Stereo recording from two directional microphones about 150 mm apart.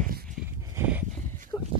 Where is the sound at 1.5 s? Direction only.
20° left (ahead or behind).